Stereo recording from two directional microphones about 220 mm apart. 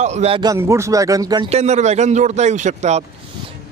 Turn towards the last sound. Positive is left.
turn(degrees=-30)  # may be behind; listen again after turning